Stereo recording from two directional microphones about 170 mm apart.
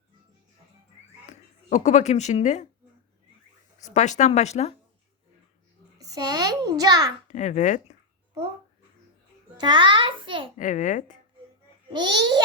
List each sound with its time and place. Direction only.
1.3 s speech: 45° left (ahead or behind)
3.8 s a child's voice: 45° left (ahead or behind)
6.0 s a child's voice: 20° right (ahead or behind)
7.3 s a child's voice: 45° left (ahead or behind)
9.6 s a child's voice: 25° right (ahead or behind)
10.6 s a child's voice: 50° left (ahead or behind)
11.9 s a child's voice: 25° right (ahead or behind)